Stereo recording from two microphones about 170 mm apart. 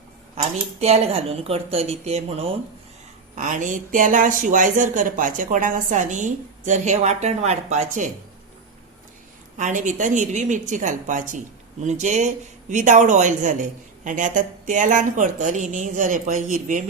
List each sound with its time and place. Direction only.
0.8 s a woman's voice: 35° right (ahead or behind)
3.3 s speech: 45° right (ahead or behind)
9.6 s speech: 45° right (ahead or behind)